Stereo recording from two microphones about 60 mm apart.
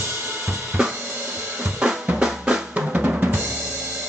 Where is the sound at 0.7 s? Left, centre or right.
Centre.